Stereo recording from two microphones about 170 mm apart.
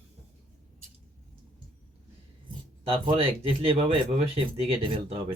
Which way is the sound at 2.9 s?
35° right (ahead or behind).